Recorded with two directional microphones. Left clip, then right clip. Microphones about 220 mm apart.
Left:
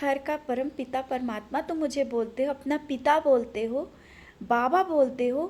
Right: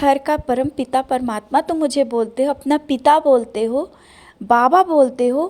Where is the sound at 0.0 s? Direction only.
35° right (ahead or behind).